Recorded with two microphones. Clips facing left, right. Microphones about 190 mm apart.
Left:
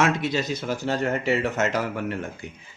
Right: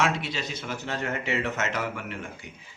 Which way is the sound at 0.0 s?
45° left (ahead or behind).